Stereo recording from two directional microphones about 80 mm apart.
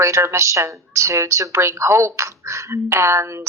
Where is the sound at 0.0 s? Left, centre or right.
Right.